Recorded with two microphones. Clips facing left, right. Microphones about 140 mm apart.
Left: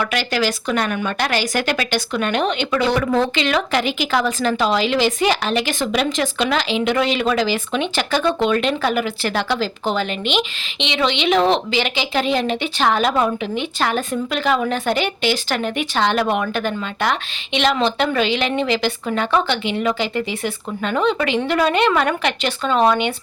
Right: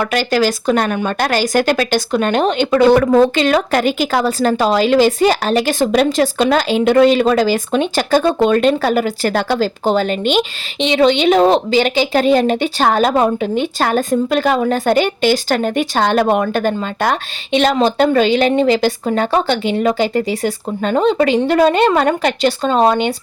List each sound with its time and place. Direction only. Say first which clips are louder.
0.0 s speech: right 5 dB; 40° right (ahead or behind)